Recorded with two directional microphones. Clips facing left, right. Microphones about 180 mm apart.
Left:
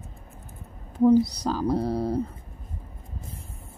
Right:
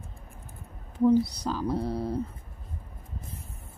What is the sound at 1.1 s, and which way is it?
Speech, 40° left (ahead or behind).